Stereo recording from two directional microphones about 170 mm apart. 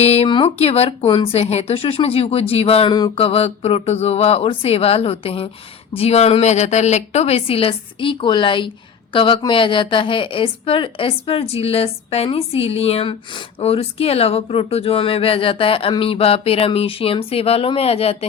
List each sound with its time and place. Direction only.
0.0 s a woman's voice: 40° left (ahead or behind)